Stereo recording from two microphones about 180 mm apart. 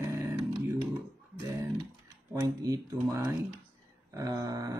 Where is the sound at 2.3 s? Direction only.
20° right (ahead or behind).